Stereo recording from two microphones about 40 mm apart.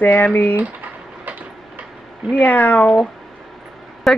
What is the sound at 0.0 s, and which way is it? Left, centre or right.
Speech, left.